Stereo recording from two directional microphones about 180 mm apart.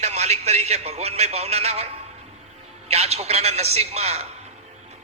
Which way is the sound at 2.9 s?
35° right (ahead or behind).